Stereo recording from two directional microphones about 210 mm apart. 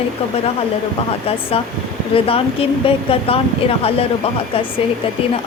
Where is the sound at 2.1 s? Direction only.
25° left (ahead or behind).